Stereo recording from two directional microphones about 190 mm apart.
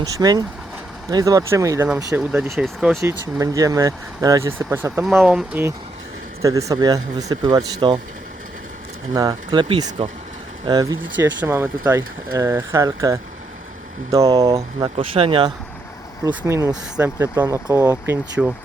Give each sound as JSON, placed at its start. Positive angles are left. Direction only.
{"t": 0.0, "sound": "speech", "side_deg": -20}
{"t": 2.3, "sound": "speech", "side_deg": -5}
{"t": 3.0, "sound": "speech", "side_deg": -15}
{"t": 9.1, "sound": "speech", "side_deg": -20}
{"t": 14.5, "sound": "speech", "side_deg": -30}
{"t": 16.2, "sound": "speech", "side_deg": -15}